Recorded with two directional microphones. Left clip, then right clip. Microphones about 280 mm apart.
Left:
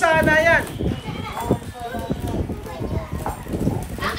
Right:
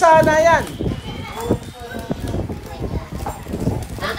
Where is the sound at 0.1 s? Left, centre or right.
Centre.